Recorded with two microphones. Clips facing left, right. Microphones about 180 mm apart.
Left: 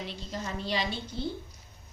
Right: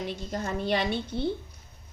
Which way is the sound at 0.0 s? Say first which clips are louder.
Right 5 dB; 50° right (ahead or behind).